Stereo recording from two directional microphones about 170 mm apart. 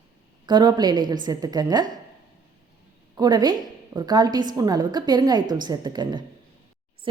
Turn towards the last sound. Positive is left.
turn(degrees=-25)  # may be behind; listen again after turning